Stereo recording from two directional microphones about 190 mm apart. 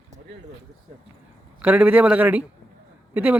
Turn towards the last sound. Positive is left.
turn(degrees=-10)  # may be behind; listen again after turning